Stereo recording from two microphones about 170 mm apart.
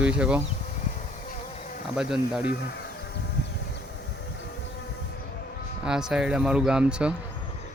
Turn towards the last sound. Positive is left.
turn(degrees=-5)  # may be behind; listen again after turning